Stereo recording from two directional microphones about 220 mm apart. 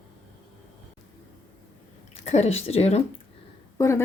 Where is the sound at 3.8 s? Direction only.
15° left (ahead or behind).